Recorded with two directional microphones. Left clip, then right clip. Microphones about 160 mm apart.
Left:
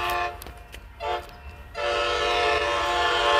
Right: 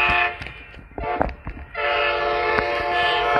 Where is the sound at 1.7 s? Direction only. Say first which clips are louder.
Right 4 dB; 45° left (ahead or behind).